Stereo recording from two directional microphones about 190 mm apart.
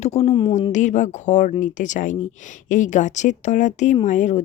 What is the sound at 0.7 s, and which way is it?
Speech, 40° left (ahead or behind).